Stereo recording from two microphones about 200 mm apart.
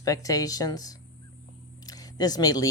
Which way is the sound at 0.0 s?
15° left (ahead or behind).